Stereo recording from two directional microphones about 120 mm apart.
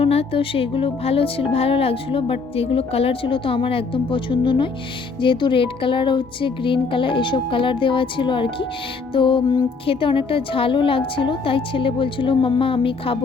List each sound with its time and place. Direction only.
0.0 s speech: 55° left (ahead or behind)